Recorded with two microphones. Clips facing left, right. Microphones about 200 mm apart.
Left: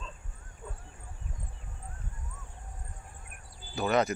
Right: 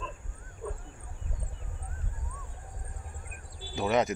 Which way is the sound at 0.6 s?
70° right (ahead or behind).